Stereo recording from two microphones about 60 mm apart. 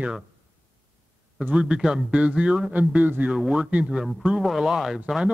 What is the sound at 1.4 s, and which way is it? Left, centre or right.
A man's voice, right.